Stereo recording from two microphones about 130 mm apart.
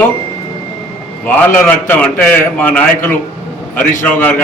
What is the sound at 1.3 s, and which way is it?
A man's voice, 10° left (ahead or behind).